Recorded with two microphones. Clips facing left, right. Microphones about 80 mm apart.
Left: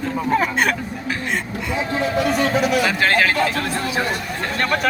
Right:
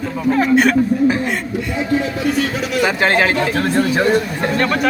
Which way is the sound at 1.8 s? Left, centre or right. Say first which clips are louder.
Right 1 dB; centre.